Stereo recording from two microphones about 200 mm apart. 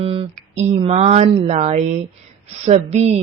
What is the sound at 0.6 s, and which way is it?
A woman's voice, 30° right (ahead or behind).